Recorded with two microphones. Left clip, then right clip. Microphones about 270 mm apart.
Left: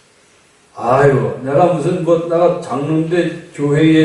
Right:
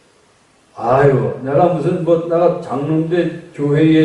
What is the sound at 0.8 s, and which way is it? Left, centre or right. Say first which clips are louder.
A man's voice: left 1 dB; centre.